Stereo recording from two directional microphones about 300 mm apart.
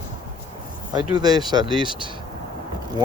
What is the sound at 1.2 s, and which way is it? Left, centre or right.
Speech, centre.